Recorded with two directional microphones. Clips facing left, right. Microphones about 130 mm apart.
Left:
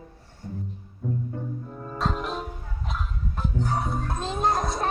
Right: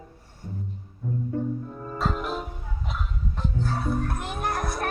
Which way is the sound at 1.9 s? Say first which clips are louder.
Even; centre (ahead or behind).